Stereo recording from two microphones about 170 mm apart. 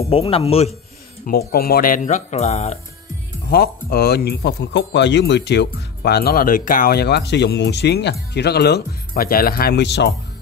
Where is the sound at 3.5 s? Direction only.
65° left (ahead or behind).